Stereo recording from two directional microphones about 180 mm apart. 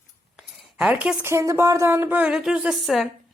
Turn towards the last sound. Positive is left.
turn(degrees=0)  # may be behind; listen again after turning